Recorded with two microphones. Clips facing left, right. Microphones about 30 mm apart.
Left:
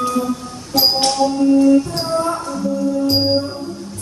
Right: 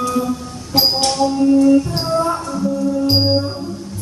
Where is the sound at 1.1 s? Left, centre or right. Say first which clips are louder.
Right 1 dB; centre.